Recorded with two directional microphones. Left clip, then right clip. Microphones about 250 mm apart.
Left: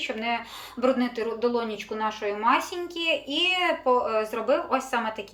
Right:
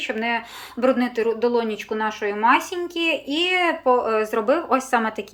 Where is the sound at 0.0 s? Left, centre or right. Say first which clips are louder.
Right 4 dB; centre.